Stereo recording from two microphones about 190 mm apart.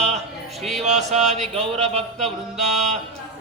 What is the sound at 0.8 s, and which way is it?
Mantra, 35° right (ahead or behind).